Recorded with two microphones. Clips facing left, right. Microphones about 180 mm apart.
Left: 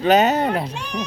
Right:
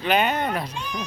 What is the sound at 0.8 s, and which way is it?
Speech, 70° left (ahead or behind).